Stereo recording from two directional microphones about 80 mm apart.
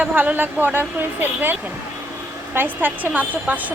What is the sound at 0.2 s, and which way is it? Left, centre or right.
Speech, right.